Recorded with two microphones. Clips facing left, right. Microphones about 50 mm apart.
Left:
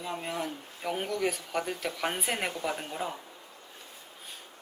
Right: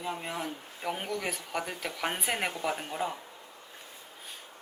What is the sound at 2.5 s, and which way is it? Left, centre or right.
Speech, centre.